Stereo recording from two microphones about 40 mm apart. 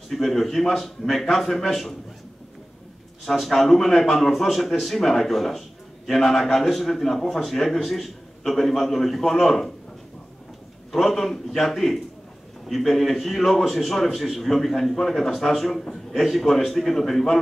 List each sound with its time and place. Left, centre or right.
0.1 s a man's voice: centre
3.3 s a man's voice: centre
10.9 s a man's voice: centre